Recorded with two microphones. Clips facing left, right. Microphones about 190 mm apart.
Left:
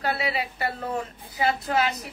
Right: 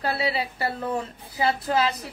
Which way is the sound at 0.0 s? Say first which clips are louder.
Right 1 dB; 30° right (ahead or behind).